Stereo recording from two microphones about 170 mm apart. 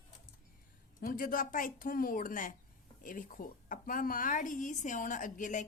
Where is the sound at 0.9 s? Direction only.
55° left (ahead or behind).